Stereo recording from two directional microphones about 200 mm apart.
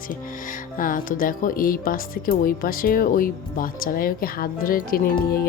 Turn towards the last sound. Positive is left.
turn(degrees=50)  # may be behind; listen again after turning